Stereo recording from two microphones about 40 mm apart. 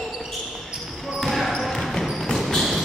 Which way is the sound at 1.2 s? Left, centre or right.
Centre.